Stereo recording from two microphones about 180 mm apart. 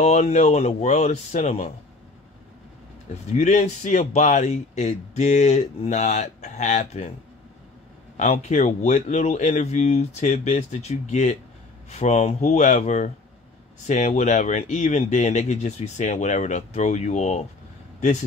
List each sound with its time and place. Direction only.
0.0 s a man's voice: 40° left (ahead or behind)
3.3 s a man's voice: 40° left (ahead or behind)
8.2 s a man's voice: 40° left (ahead or behind)